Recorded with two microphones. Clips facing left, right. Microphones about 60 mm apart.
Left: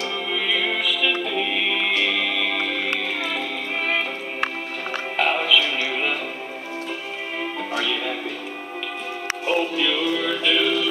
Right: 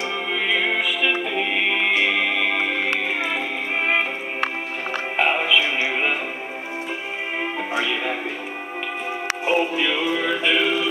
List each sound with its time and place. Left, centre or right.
0.3 s music: centre
5.1 s music: right
7.7 s music: right
9.5 s music: right